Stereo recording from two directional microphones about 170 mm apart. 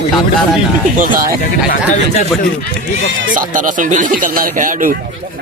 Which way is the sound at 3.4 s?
50° right (ahead or behind).